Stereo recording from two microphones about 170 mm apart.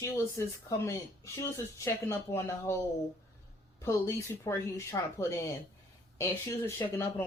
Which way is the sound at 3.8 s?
15° left (ahead or behind).